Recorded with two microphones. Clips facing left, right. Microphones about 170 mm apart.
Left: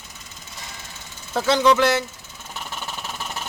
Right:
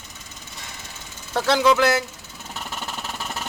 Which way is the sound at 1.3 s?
Centre (ahead or behind).